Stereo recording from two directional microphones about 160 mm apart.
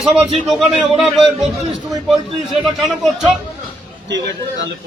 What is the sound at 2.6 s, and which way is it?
Speech, centre (ahead or behind).